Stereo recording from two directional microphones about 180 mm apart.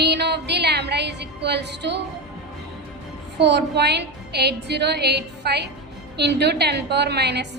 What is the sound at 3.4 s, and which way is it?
A woman's voice, 70° right (ahead or behind).